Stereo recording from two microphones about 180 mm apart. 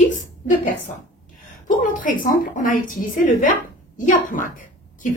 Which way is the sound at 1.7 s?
45° left (ahead or behind).